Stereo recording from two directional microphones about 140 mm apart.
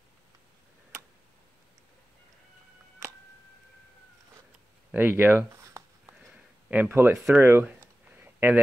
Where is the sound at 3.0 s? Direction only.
20° right (ahead or behind).